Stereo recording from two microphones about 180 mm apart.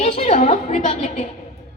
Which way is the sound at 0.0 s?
45° left (ahead or behind).